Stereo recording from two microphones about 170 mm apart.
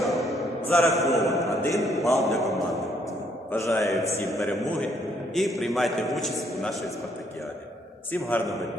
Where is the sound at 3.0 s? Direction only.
15° left (ahead or behind).